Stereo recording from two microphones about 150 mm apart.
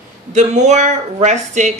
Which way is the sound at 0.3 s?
50° right (ahead or behind).